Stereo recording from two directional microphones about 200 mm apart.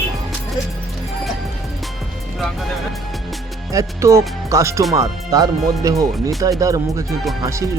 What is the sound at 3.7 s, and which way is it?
Speech, 15° right (ahead or behind).